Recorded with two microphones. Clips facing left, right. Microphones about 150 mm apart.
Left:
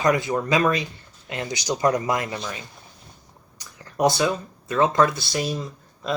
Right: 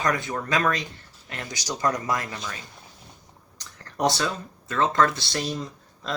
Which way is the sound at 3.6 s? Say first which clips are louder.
Left 4 dB; 10° left (ahead or behind).